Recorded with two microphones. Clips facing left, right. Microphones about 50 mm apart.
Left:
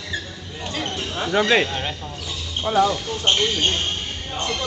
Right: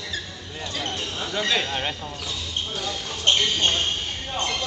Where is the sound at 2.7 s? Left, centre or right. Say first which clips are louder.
Left 14 dB; left.